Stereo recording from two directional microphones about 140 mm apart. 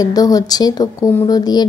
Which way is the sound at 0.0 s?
25° left (ahead or behind).